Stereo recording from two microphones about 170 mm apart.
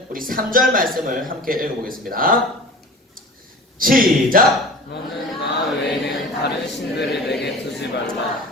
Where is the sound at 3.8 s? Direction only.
55° right (ahead or behind).